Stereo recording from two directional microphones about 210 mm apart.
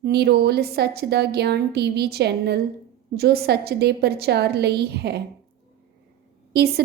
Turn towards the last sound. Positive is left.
turn(degrees=-50)  # may be behind; listen again after turning